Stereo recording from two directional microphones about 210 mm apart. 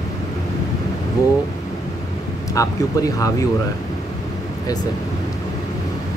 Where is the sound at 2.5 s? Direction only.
15° left (ahead or behind).